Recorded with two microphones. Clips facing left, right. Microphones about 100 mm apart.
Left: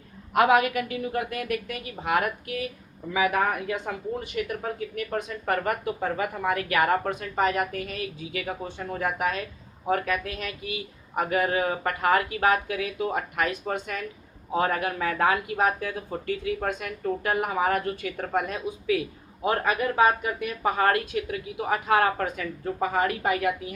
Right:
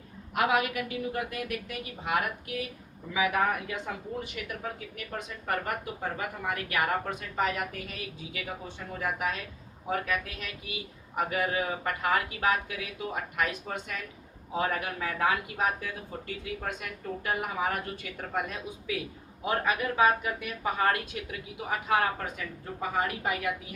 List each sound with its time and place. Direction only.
0.3 s speech: 65° left (ahead or behind); by 5.2 s 50° left (ahead or behind)
5.5 s speech: 85° left; by 23.5 s 65° left (ahead or behind)